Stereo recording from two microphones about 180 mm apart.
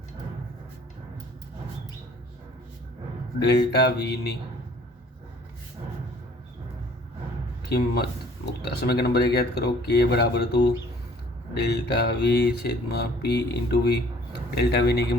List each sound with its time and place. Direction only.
3.4 s mantra: 65° left (ahead or behind)
7.7 s mantra: 60° left (ahead or behind)